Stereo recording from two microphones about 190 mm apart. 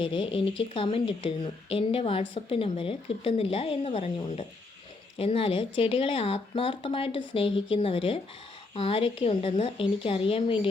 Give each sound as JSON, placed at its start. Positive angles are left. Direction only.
{"t": 0.0, "sound": "speech", "side_deg": 30}